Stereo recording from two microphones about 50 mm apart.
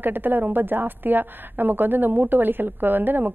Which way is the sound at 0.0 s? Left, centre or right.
Right.